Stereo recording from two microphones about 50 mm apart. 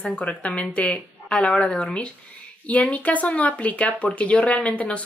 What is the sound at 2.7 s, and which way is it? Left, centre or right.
Speech, left.